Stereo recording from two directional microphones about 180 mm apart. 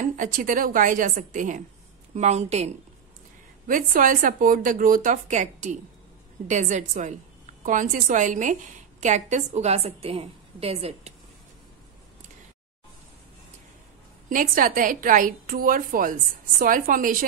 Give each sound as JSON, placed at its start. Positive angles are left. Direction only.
{"t": 0.0, "sound": "a woman's voice", "side_deg": -45}
{"t": 3.6, "sound": "a woman's voice", "side_deg": -50}
{"t": 14.3, "sound": "a woman's voice", "side_deg": -50}